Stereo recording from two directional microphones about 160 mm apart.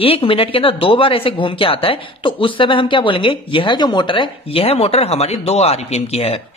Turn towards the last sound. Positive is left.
turn(degrees=40)  # may be behind; listen again after turning